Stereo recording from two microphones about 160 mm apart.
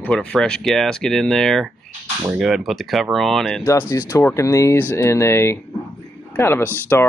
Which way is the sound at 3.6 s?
15° left (ahead or behind).